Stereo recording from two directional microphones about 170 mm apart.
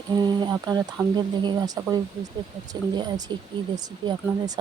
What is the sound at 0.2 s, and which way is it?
Speech, 25° right (ahead or behind).